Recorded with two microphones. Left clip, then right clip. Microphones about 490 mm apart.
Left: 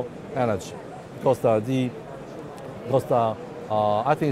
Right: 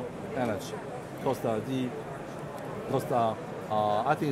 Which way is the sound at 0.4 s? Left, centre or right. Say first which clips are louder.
Left 7 dB; left.